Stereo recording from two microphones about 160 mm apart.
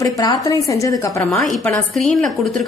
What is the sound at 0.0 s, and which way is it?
A woman's voice, 20° left (ahead or behind).